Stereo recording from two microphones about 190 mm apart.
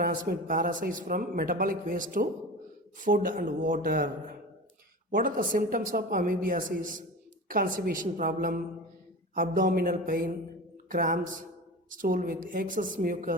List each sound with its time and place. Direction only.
0.0 s speech: 50° right (ahead or behind)